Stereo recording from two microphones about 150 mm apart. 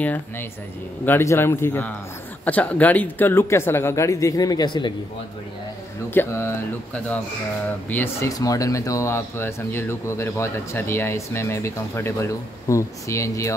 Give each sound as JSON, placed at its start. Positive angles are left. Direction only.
{"t": 0.0, "sound": "speech", "side_deg": 10}
{"t": 6.1, "sound": "speech", "side_deg": 15}